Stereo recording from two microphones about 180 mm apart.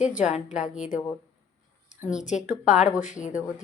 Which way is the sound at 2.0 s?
5° right (ahead or behind).